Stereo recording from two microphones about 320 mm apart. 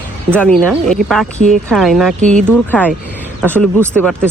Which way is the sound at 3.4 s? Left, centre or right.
Centre.